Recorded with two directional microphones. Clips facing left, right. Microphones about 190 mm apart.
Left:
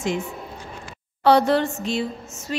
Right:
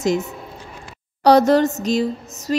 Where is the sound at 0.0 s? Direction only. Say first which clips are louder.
Right 5 dB; 40° right (ahead or behind).